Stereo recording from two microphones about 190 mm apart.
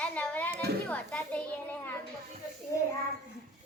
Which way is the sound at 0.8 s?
5° left (ahead or behind).